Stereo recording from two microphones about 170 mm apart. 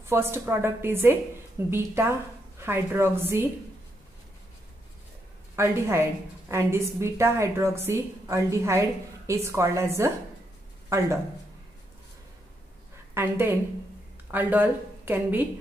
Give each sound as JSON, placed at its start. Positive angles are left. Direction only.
{"t": 0.0, "sound": "a woman's voice", "side_deg": -15}
{"t": 5.6, "sound": "a woman's voice", "side_deg": -15}
{"t": 13.1, "sound": "a woman's voice", "side_deg": -10}